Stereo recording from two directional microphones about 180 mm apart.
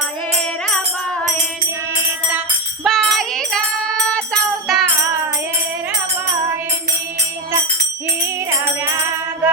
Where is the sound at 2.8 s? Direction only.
Centre (ahead or behind).